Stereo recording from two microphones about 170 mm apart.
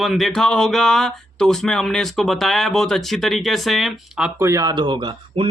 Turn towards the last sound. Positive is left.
turn(degrees=-30)  # may be behind; listen again after turning